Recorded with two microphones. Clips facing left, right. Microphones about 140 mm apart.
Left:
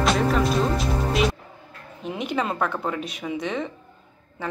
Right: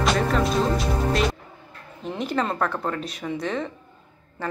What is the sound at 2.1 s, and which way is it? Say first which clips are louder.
A woman's voice: right 1 dB; centre (ahead or behind).